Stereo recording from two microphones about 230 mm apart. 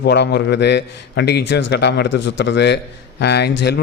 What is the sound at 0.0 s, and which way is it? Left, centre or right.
A man's voice, left.